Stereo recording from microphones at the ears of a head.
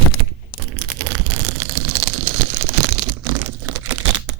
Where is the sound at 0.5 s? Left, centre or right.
Right.